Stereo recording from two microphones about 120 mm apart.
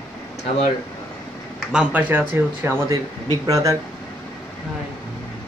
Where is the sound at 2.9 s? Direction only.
30° right (ahead or behind).